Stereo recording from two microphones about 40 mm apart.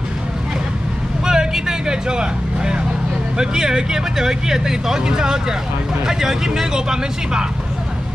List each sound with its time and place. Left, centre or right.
1.2 s vehicle: centre
3.3 s speech: centre